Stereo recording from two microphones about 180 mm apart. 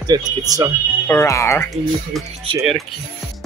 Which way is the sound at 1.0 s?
15° left (ahead or behind).